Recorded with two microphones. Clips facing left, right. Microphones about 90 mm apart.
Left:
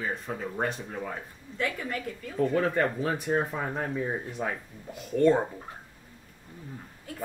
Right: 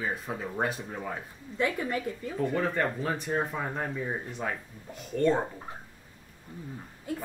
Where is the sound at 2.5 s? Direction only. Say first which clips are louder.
Left 3 dB; centre (ahead or behind).